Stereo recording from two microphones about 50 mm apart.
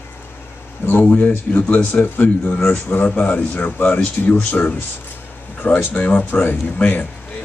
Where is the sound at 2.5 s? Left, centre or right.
Left.